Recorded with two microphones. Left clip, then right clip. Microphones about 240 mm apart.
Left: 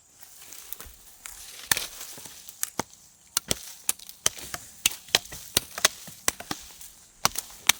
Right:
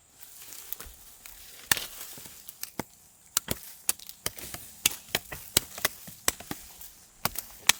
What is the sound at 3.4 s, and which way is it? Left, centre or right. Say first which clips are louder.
Chop: left 1 dB; centre.